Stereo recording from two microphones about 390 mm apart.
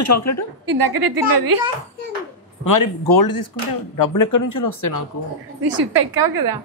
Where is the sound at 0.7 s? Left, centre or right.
Right.